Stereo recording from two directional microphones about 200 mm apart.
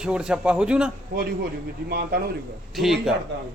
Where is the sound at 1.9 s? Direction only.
50° right (ahead or behind).